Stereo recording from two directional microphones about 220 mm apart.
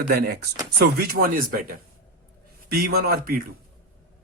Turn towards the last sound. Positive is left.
turn(degrees=-45)  # may be behind; listen again after turning